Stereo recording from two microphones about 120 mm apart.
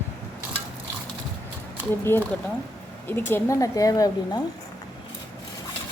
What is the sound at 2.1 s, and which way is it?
Speech, 20° left (ahead or behind).